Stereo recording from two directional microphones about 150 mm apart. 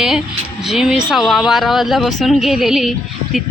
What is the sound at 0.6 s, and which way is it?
Speech, centre (ahead or behind).